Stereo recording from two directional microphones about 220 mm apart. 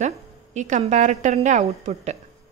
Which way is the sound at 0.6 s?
35° right (ahead or behind).